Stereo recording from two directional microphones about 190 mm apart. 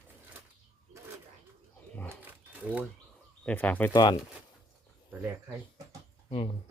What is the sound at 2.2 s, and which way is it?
Crumpling, 5° right (ahead or behind).